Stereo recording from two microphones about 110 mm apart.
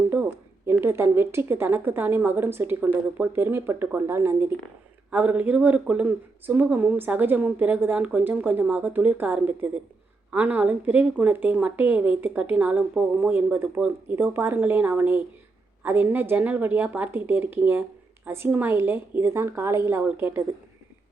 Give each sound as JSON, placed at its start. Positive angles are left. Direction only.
{"t": 0.1, "sound": "a woman's voice", "side_deg": -20}